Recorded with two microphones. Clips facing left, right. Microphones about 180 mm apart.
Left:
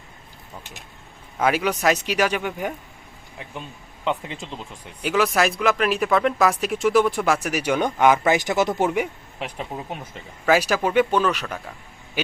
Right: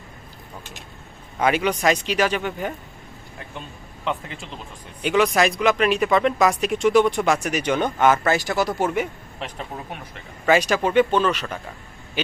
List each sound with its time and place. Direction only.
1.4 s speech: 5° left (ahead or behind)
4.0 s speech: 20° left (ahead or behind)
5.0 s speech: centre (ahead or behind); by 10.1 s 20° left (ahead or behind)
10.4 s speech: 5° left (ahead or behind)